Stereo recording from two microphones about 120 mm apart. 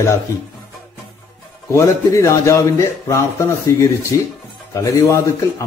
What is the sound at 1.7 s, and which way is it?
Speech, 25° left (ahead or behind).